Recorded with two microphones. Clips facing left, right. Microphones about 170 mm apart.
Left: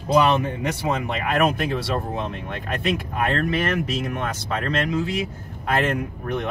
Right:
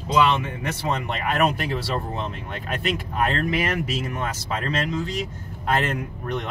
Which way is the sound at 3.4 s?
10° right (ahead or behind).